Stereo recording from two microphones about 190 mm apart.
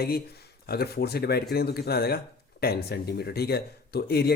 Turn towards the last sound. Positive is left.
turn(degrees=55)  # may be behind; listen again after turning